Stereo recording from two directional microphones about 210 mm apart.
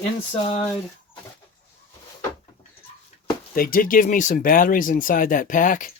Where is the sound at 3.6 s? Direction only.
45° left (ahead or behind).